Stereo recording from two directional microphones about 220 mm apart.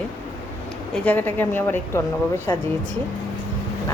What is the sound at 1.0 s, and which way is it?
A woman's voice, 10° left (ahead or behind).